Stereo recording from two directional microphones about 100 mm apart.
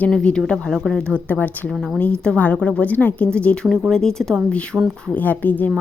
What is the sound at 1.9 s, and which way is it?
A woman's voice, 10° left (ahead or behind).